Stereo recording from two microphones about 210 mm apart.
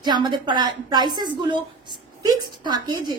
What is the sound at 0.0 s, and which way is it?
A woman's voice, 20° right (ahead or behind).